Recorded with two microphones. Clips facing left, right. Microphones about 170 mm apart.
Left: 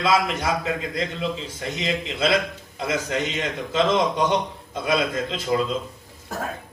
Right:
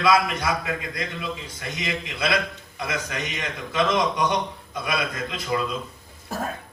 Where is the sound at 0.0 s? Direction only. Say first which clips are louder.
Right 1 dB; 25° left (ahead or behind).